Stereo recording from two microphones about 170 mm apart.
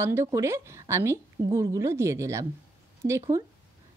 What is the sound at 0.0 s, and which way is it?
A woman's voice, 15° right (ahead or behind).